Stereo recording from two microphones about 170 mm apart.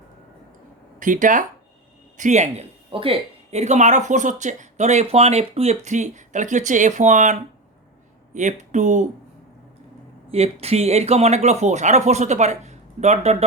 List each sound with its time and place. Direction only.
0.9 s speech: 50° right (ahead or behind)
10.2 s speech: 35° right (ahead or behind)